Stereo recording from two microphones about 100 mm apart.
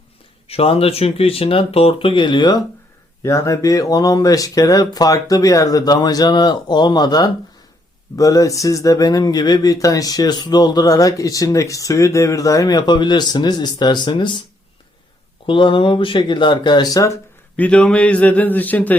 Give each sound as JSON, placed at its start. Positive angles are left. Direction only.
{"t": 0.4, "sound": "speech", "side_deg": 80}
{"t": 3.2, "sound": "speech", "side_deg": 30}
{"t": 15.4, "sound": "speech", "side_deg": 60}
{"t": 17.6, "sound": "a man's voice", "side_deg": 10}